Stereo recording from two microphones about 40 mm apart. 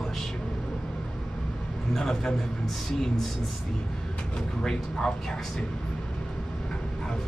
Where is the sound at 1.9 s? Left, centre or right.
Centre.